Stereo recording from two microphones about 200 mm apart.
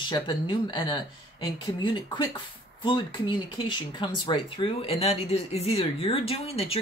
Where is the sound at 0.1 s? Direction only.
25° left (ahead or behind).